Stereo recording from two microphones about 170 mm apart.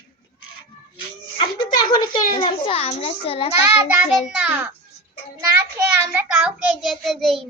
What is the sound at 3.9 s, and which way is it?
A child's voice, 5° right (ahead or behind).